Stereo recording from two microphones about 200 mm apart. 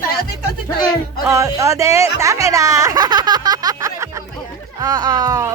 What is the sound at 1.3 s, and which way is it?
Speech, 15° right (ahead or behind).